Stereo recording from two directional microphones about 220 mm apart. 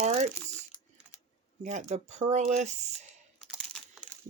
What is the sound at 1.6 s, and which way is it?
Speech, 30° right (ahead or behind).